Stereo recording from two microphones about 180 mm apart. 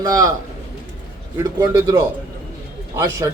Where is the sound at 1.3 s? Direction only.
15° right (ahead or behind).